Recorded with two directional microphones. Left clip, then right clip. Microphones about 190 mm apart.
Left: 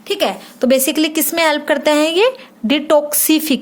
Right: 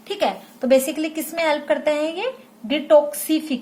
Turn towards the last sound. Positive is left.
turn(degrees=55)  # may be behind; listen again after turning